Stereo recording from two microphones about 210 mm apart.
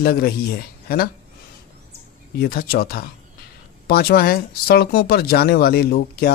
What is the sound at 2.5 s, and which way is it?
A man's voice, 45° left (ahead or behind).